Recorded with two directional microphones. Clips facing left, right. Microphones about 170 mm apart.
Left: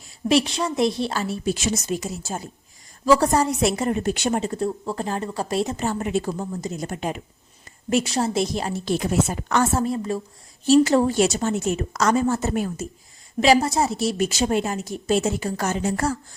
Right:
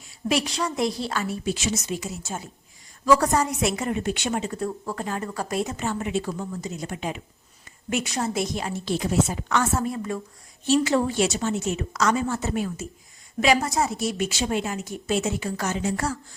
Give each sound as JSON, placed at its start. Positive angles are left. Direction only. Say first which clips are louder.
{"t": 0.3, "sound": "a woman's voice", "louder": "left 5 dB", "side_deg": 25}
{"t": 4.6, "sound": "a woman's voice", "louder": "left 4 dB", "side_deg": 25}
{"t": 7.9, "sound": "a woman's voice", "louder": "left 5 dB", "side_deg": 35}
{"t": 8.9, "sound": "speech", "louder": "left 1 dB", "side_deg": 55}
{"t": 9.7, "sound": "a woman's voice", "louder": "left 3 dB", "side_deg": 30}
{"t": 13.4, "sound": "a woman's voice", "louder": "left 4 dB", "side_deg": 30}